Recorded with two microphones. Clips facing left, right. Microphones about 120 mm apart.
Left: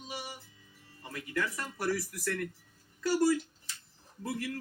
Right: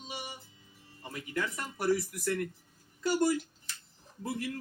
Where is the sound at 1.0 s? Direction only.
20° right (ahead or behind).